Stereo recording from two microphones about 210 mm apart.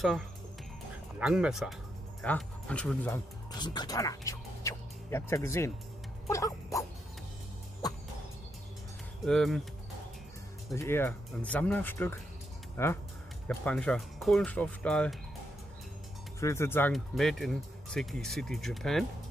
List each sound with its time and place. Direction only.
1.2 s speech: 5° right (ahead or behind)
3.5 s speech: 20° left (ahead or behind)
6.3 s dog: 15° left (ahead or behind)
9.2 s speech: centre (ahead or behind)
10.7 s speech: 10° left (ahead or behind)
16.3 s speech: 15° left (ahead or behind)